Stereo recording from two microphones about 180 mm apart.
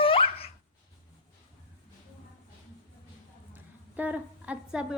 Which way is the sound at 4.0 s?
5° right (ahead or behind).